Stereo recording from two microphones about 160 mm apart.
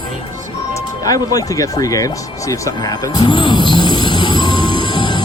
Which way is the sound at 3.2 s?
30° left (ahead or behind).